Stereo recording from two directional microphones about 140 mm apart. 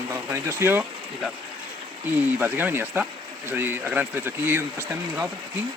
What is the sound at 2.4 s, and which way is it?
Speech, 15° right (ahead or behind).